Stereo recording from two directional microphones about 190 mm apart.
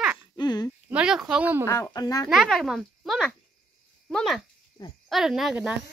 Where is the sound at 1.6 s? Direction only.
15° left (ahead or behind).